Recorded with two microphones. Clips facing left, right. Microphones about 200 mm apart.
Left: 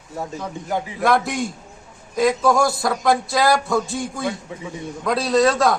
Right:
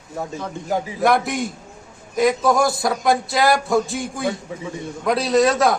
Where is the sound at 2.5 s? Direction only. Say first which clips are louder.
Even; 20° right (ahead or behind).